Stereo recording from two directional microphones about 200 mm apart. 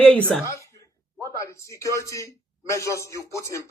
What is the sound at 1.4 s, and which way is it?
A man's voice, 15° left (ahead or behind).